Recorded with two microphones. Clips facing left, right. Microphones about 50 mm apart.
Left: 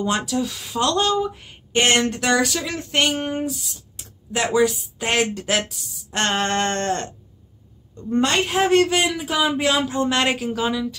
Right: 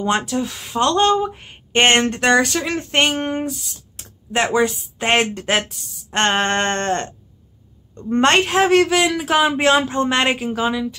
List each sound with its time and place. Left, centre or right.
0.0 s speech: right
8.1 s a woman's voice: right
8.5 s speech: right
10.1 s speech: right